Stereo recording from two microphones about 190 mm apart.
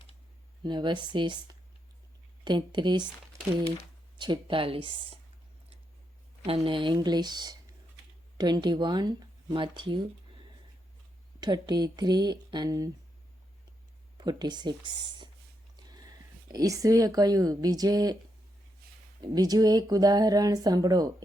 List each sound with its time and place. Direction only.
0.6 s speech: 25° right (ahead or behind)
2.4 s speech: 25° right (ahead or behind)
4.2 s speech: 25° right (ahead or behind)
6.6 s speech: 25° right (ahead or behind)
11.3 s speech: 20° right (ahead or behind)
14.2 s speech: 20° right (ahead or behind)
19.2 s speech: 20° right (ahead or behind)